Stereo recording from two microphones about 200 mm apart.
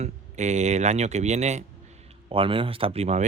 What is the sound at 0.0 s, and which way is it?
Speech, 35° right (ahead or behind).